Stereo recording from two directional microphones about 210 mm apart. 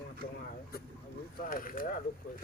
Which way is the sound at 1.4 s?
40° left (ahead or behind).